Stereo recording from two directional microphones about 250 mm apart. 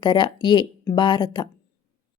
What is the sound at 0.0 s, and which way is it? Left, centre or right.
Speech, centre.